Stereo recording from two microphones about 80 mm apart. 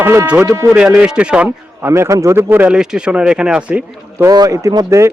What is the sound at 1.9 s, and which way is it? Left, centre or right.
Speech, right.